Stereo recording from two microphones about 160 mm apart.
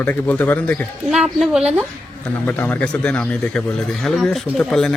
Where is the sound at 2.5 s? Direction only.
10° left (ahead or behind).